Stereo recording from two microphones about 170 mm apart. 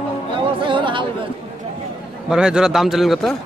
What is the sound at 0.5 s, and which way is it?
Chatter, 30° right (ahead or behind).